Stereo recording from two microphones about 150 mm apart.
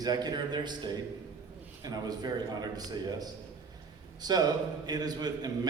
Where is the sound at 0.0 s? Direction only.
25° right (ahead or behind).